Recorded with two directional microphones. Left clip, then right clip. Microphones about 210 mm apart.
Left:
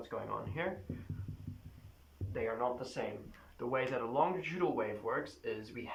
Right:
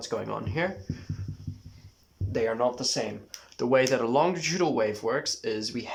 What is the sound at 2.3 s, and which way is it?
Speech, 50° right (ahead or behind).